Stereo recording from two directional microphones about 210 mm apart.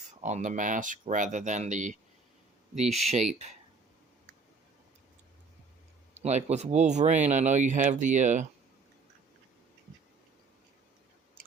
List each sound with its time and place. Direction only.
0.2 s speech: 35° right (ahead or behind)
6.1 s speech: 30° right (ahead or behind)